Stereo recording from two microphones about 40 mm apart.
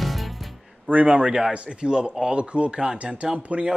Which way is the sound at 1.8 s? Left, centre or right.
Right.